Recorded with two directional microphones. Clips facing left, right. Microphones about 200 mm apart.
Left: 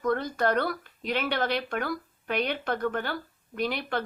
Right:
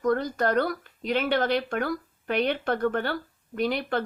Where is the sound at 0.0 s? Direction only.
40° right (ahead or behind).